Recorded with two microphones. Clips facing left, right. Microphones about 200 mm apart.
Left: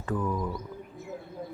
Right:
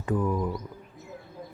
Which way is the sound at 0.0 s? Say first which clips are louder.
Right 3 dB; 15° right (ahead or behind).